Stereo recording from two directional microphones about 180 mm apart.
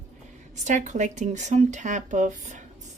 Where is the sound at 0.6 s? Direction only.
40° right (ahead or behind).